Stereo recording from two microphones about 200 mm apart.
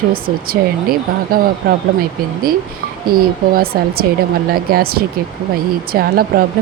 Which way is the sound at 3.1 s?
50° right (ahead or behind).